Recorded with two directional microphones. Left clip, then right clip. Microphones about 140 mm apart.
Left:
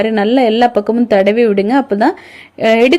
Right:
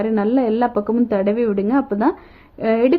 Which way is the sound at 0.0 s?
25° left (ahead or behind).